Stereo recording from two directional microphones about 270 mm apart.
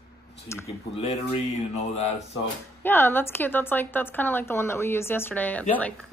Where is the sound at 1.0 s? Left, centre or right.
Left.